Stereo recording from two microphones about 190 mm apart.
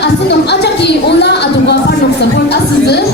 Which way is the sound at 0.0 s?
60° left (ahead or behind).